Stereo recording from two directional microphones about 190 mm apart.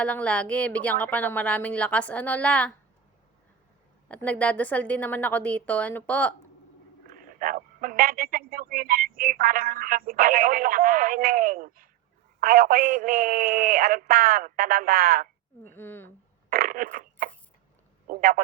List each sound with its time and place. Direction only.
0.0 s speech: 5° left (ahead or behind)
4.1 s speech: 5° left (ahead or behind)
7.1 s a man's voice: 45° right (ahead or behind)
15.6 s speech: 10° left (ahead or behind)
16.5 s a sound: 50° right (ahead or behind)
18.1 s a man's voice: 50° right (ahead or behind)